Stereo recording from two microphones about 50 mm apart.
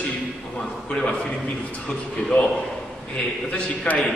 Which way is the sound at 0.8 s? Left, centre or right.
Centre.